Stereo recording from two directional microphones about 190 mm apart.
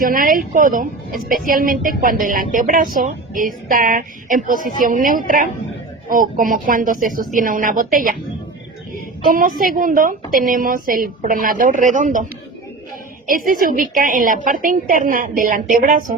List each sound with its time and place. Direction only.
0.0 s a woman's voice: 45° right (ahead or behind)
9.3 s a woman's voice: 50° right (ahead or behind)
13.2 s a woman's voice: 45° right (ahead or behind)